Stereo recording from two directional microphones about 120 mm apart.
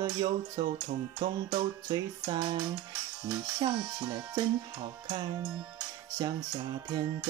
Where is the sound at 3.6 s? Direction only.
35° right (ahead or behind).